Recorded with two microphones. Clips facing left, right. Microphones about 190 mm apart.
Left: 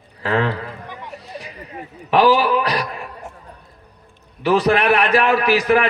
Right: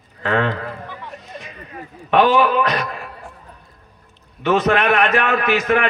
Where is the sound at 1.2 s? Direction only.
35° left (ahead or behind).